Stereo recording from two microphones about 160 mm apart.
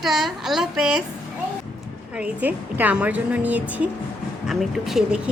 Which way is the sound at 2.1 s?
10° right (ahead or behind).